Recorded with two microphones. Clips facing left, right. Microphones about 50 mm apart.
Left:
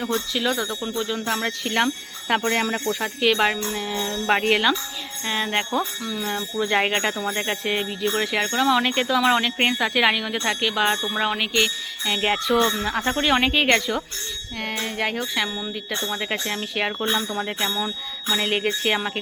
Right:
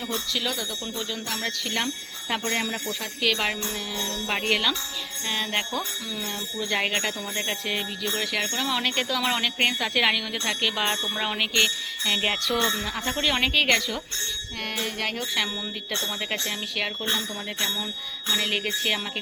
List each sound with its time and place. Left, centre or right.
0.3 s speech: centre
1.8 s speech: left
2.3 s speech: left
3.2 s speech: centre
5.8 s jingle bell: centre
6.2 s speech: left
8.5 s speech: centre
10.6 s jingle bell: centre
12.8 s speech: centre
15.2 s jingle bell: centre
18.3 s speech: left